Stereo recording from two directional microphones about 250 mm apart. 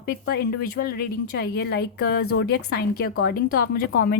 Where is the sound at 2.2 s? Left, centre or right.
Left.